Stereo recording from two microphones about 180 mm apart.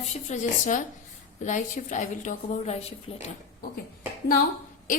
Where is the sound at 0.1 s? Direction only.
40° left (ahead or behind).